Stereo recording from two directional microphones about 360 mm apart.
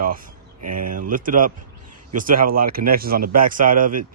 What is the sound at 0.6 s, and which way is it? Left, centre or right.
Speech, right.